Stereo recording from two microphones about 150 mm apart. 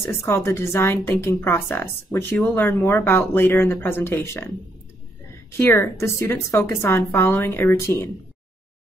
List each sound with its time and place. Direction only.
0.0 s a woman's voice: 20° left (ahead or behind)
5.6 s a woman's voice: 15° left (ahead or behind)